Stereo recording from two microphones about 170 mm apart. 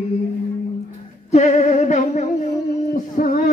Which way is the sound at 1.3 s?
40° left (ahead or behind).